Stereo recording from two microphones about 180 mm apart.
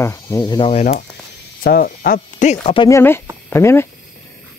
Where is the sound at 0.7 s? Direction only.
40° left (ahead or behind).